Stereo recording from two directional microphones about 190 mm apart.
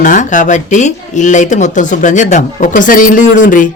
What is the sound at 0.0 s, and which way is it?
Speech, 40° left (ahead or behind).